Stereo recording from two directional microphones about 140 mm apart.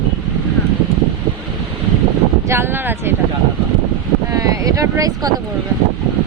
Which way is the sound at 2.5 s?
15° right (ahead or behind).